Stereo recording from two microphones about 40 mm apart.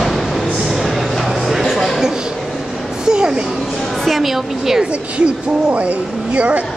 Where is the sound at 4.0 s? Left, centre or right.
Centre.